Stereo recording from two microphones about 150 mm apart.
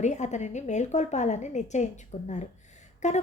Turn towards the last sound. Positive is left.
turn(degrees=50)  # may be behind; listen again after turning